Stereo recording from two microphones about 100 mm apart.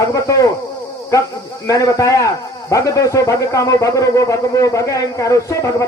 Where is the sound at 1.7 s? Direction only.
35° left (ahead or behind).